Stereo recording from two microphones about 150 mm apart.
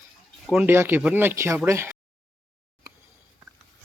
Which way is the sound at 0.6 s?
15° right (ahead or behind).